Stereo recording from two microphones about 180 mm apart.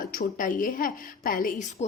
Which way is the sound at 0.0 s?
50° left (ahead or behind).